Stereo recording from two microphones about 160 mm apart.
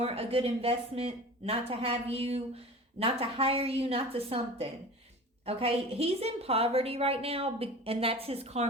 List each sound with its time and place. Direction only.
0.0 s a woman's voice: 40° right (ahead or behind)